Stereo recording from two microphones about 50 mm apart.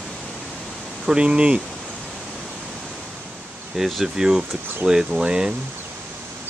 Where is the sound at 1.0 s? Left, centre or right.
Centre.